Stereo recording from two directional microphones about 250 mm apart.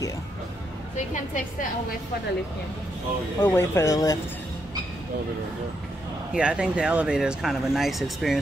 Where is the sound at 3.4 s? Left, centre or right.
Centre.